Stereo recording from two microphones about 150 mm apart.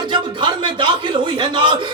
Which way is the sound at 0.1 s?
35° right (ahead or behind).